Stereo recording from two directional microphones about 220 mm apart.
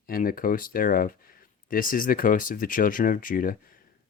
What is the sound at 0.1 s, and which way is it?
Speech, 40° left (ahead or behind).